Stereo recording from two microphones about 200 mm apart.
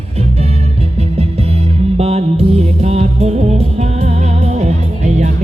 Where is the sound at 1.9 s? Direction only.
30° right (ahead or behind).